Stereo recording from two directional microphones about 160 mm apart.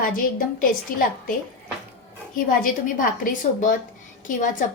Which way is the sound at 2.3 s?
60° left (ahead or behind).